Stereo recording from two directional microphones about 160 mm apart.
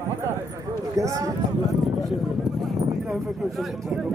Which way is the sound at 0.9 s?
20° right (ahead or behind).